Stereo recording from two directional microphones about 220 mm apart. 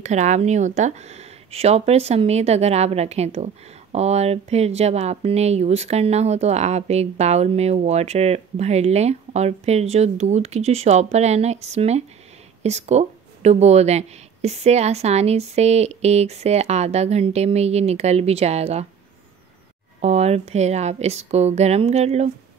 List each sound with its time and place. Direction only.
0.0 s speech: 30° right (ahead or behind)
20.0 s speech: 30° right (ahead or behind)